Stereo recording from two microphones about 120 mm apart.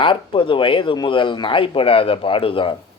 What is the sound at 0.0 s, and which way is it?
Speech, 45° left (ahead or behind).